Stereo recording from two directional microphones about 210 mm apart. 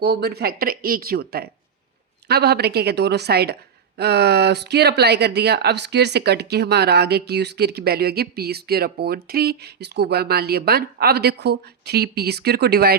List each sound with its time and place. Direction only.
0.0 s a woman's voice: 50° right (ahead or behind)